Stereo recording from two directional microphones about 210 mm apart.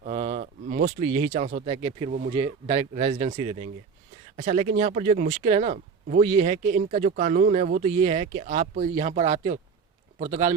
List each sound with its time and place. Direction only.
0.0 s speech: 35° right (ahead or behind)